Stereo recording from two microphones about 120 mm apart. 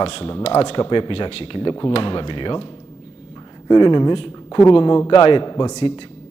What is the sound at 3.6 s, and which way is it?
A man's voice, 40° left (ahead or behind).